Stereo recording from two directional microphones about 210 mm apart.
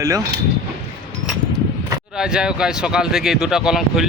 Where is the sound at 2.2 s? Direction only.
5° right (ahead or behind).